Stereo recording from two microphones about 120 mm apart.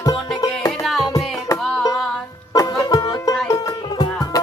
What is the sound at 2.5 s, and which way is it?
Music, 30° left (ahead or behind).